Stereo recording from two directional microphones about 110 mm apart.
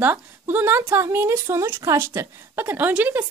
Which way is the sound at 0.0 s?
20° right (ahead or behind).